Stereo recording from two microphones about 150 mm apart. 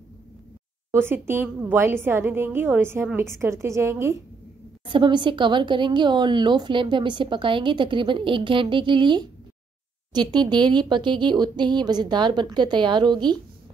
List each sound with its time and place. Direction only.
0.9 s a woman's voice: 15° right (ahead or behind)
4.8 s a woman's voice: 35° right (ahead or behind)